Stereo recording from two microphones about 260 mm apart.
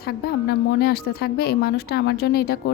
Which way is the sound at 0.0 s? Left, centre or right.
Left.